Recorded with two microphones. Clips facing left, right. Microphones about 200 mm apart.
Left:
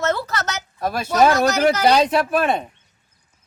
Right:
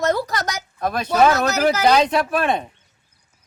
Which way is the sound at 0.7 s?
5° left (ahead or behind).